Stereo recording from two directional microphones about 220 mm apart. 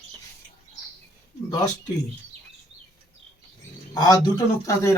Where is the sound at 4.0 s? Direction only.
15° left (ahead or behind).